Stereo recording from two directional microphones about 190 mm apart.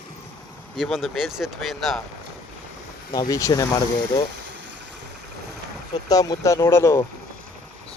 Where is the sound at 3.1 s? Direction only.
20° left (ahead or behind).